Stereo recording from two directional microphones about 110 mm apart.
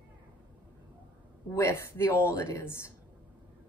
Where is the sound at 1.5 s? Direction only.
30° left (ahead or behind).